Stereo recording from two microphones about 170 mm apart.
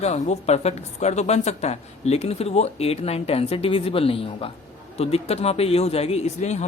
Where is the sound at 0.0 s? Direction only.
40° left (ahead or behind).